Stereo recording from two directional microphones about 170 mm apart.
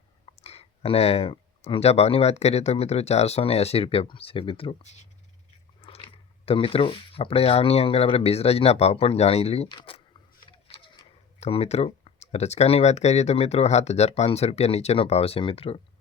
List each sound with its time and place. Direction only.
0.4 s speech: 35° left (ahead or behind)